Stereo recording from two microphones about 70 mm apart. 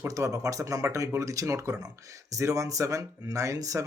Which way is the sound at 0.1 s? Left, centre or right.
Right.